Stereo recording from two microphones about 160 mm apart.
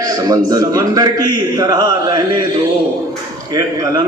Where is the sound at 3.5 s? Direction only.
25° right (ahead or behind).